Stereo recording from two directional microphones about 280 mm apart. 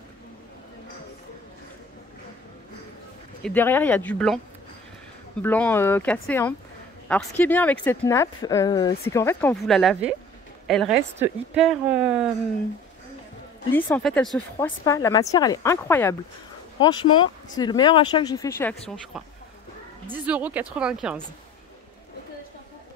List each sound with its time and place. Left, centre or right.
3.4 s a woman's voice: centre
5.4 s a woman's voice: centre
13.7 s speech: centre
20.1 s a woman's voice: centre